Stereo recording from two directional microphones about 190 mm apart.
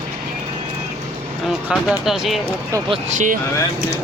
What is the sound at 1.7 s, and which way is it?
Speech, 5° right (ahead or behind).